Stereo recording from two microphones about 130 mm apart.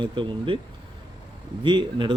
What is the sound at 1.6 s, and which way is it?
Speech, 35° right (ahead or behind).